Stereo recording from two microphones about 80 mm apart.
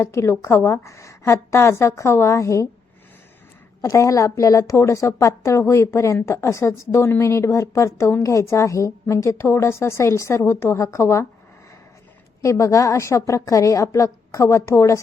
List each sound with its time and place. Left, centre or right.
0.0 s a woman's voice: left
3.8 s a woman's voice: left
12.4 s a woman's voice: left